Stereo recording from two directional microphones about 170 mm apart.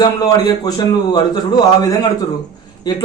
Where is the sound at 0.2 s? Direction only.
25° left (ahead or behind).